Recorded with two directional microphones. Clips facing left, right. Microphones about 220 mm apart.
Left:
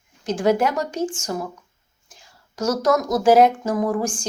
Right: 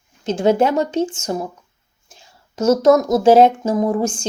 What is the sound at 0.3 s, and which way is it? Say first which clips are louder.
Speech: right 4 dB; 25° right (ahead or behind).